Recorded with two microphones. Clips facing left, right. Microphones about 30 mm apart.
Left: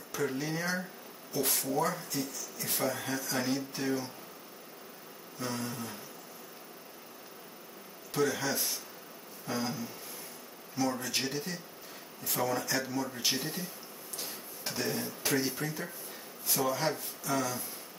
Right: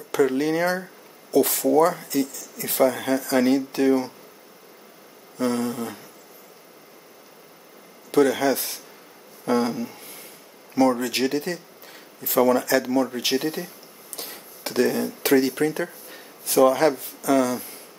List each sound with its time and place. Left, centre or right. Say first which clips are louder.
0.4 s speech: right 11 dB; right
5.4 s speech: right 12 dB; right
8.1 s speech: right 11 dB; right
11.0 s speech: right 10 dB; right
14.1 s a sound: right 5 dB; right
15.2 s speech: right 13 dB; right